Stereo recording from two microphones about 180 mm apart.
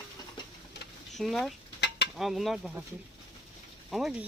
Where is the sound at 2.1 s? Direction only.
Centre (ahead or behind).